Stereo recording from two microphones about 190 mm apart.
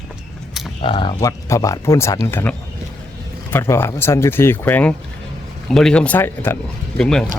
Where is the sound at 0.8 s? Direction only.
25° left (ahead or behind).